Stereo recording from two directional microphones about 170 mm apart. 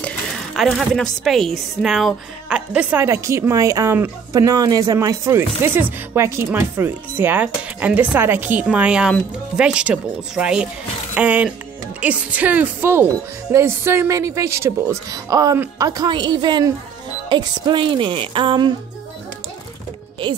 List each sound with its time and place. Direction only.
0.6 s a woman's voice: centre (ahead or behind); by 18.7 s 30° right (ahead or behind)